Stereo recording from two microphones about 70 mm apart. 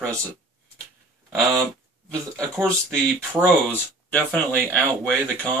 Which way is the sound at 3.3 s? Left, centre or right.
Left.